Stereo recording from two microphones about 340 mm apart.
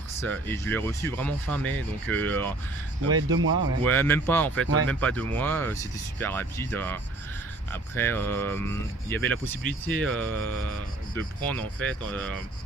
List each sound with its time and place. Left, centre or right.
0.2 s speech: centre
3.2 s speech: right
3.8 s speech: centre
4.6 s speech: right
4.9 s speech: centre